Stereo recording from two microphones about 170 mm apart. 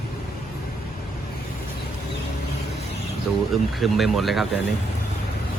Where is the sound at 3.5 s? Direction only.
Centre (ahead or behind).